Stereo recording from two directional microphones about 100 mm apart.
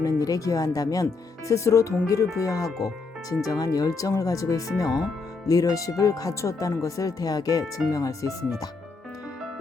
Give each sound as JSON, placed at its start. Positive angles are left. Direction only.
{"t": 0.0, "sound": "speech", "side_deg": 35}
{"t": 2.6, "sound": "speech", "side_deg": 0}
{"t": 3.2, "sound": "speech", "side_deg": 35}